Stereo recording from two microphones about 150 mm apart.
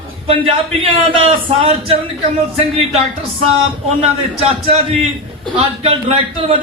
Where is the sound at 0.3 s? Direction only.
35° right (ahead or behind).